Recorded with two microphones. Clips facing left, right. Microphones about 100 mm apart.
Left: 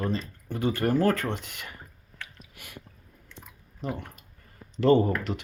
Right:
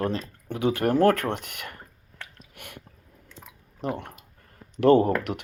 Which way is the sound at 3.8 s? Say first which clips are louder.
Right 3 dB; 65° right (ahead or behind).